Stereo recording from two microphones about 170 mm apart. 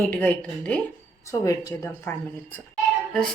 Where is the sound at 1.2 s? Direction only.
20° left (ahead or behind).